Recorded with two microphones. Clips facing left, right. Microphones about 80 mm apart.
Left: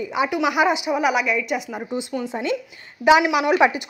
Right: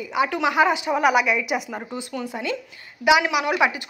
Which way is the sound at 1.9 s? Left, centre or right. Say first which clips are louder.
Left 6 dB; centre.